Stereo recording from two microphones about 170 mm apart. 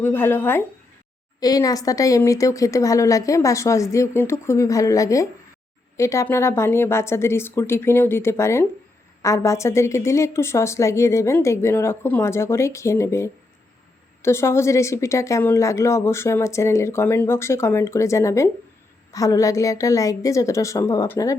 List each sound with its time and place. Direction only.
0.0 s a woman's voice: 15° left (ahead or behind)